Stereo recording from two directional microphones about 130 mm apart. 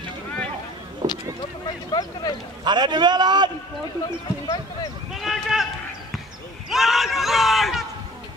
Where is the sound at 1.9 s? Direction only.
30° left (ahead or behind).